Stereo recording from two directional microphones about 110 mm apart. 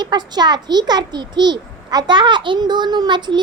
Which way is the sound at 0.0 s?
40° right (ahead or behind).